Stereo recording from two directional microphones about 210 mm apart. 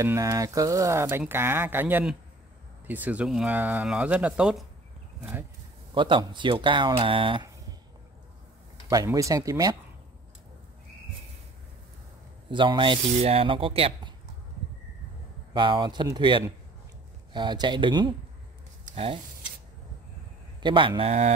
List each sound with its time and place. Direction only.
0.0 s speech: 15° right (ahead or behind)
5.9 s speech: 25° right (ahead or behind)
8.8 s speech: 15° right (ahead or behind)
12.4 s speech: 20° right (ahead or behind)
15.5 s speech: 25° right (ahead or behind)
20.6 s speech: 25° right (ahead or behind)